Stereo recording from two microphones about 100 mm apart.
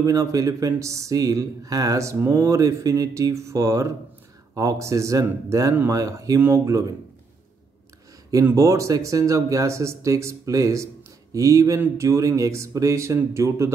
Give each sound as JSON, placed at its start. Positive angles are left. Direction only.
{"t": 0.0, "sound": "speech", "side_deg": -35}
{"t": 8.5, "sound": "speech", "side_deg": -35}